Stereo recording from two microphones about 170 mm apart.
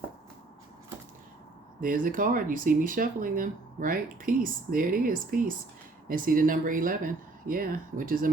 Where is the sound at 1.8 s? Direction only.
55° right (ahead or behind).